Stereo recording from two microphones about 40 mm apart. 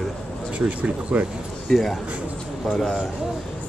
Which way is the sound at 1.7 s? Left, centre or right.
Centre.